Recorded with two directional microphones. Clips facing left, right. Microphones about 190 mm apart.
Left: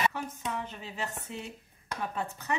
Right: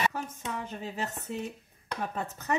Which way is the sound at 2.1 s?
40° right (ahead or behind).